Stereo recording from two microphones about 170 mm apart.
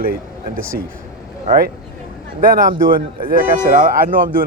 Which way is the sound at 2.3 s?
55° right (ahead or behind).